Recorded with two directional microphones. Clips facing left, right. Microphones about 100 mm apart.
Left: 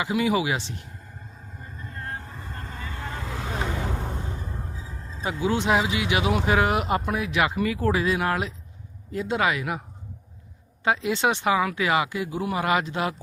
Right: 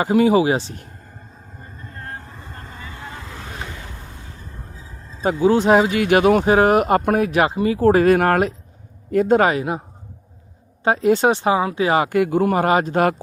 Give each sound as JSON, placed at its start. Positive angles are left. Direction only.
{"t": 0.0, "sound": "speech", "side_deg": -40}
{"t": 1.8, "sound": "vehicle", "side_deg": -35}
{"t": 3.1, "sound": "vehicle", "side_deg": 0}
{"t": 3.8, "sound": "vehicle", "side_deg": 85}
{"t": 5.2, "sound": "speech", "side_deg": -45}
{"t": 7.5, "sound": "speech", "side_deg": -30}
{"t": 10.8, "sound": "speech", "side_deg": -45}
{"t": 12.0, "sound": "speech", "side_deg": -60}